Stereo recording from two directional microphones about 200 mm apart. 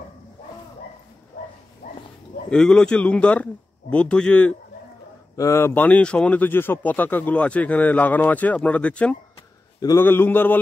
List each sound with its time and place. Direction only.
1.8 s dog: 40° left (ahead or behind)
2.5 s speech: 5° left (ahead or behind)